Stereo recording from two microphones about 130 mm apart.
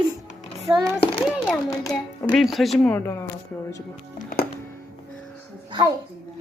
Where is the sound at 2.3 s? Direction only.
Centre (ahead or behind).